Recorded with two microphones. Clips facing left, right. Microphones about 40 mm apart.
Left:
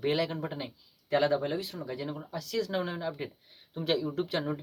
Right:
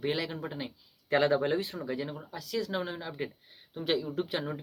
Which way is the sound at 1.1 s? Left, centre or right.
Right.